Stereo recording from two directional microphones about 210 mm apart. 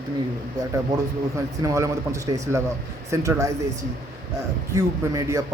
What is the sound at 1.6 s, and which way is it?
Speech, 15° right (ahead or behind).